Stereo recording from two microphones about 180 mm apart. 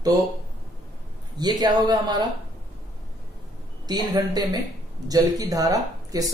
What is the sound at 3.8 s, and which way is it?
Speech, 20° right (ahead or behind).